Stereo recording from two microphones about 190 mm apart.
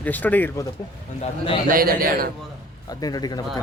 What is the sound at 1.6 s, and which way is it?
Speech, 50° right (ahead or behind).